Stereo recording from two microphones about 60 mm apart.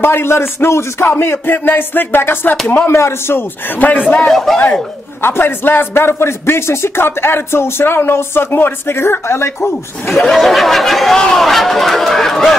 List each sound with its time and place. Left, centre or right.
0.0 s speech: left
4.2 s speech: centre
5.2 s speech: left
10.1 s speech: centre